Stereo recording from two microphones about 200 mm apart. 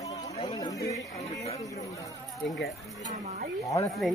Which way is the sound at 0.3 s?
20° left (ahead or behind).